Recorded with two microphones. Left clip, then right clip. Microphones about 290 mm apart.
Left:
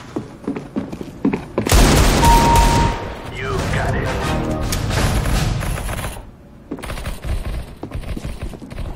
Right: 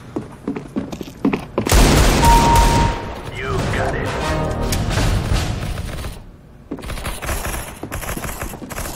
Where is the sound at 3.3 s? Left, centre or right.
Centre.